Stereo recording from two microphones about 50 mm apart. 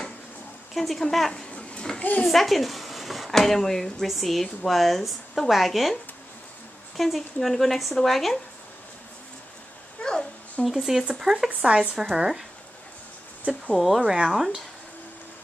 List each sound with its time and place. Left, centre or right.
0.7 s speech: centre
1.3 s a sound: centre
2.2 s speech: centre
7.0 s speech: centre
10.0 s a sound: centre
10.6 s speech: centre
11.4 s speech: centre
11.9 s speech: centre
13.7 s speech: centre